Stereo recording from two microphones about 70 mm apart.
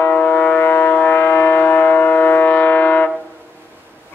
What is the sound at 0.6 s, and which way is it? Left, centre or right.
Vehicle, left.